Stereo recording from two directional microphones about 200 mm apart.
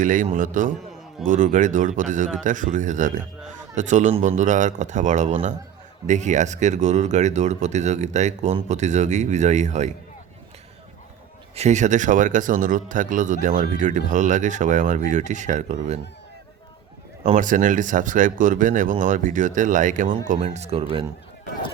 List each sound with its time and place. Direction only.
0.0 s speech: 40° right (ahead or behind)
11.5 s speech: 35° right (ahead or behind)
17.2 s speech: 40° right (ahead or behind)